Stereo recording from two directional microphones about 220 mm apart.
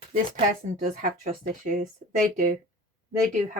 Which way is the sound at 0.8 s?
35° right (ahead or behind).